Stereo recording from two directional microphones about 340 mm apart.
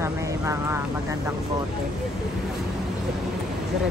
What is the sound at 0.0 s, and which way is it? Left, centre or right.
Vehicle, centre.